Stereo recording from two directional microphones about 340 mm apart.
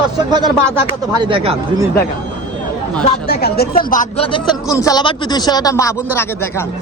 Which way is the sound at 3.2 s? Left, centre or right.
Left.